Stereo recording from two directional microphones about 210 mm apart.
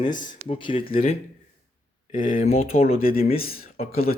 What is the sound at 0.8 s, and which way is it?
Speech, 25° left (ahead or behind).